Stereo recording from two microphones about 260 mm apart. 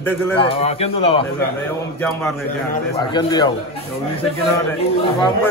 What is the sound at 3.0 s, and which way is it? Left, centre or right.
Speech, centre.